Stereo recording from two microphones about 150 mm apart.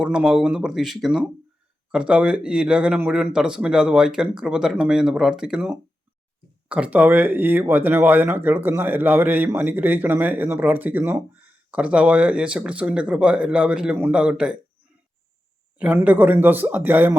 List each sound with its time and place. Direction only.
0.0 s speech: 5° right (ahead or behind)
15.8 s speech: 10° right (ahead or behind)